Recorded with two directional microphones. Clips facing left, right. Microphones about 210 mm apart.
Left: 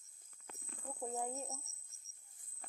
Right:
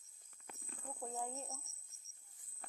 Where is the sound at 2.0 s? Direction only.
30° left (ahead or behind).